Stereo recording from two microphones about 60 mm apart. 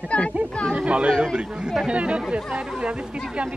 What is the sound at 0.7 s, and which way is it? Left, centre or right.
Chatter, centre.